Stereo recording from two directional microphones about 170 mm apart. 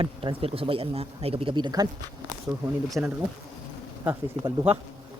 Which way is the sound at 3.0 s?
5° right (ahead or behind).